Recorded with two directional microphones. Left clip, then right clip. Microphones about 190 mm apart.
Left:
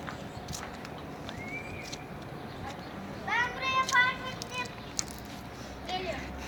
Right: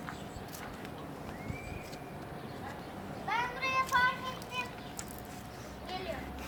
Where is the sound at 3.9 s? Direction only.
45° left (ahead or behind).